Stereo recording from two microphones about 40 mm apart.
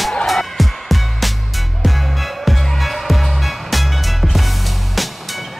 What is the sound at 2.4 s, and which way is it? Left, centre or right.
Music, centre.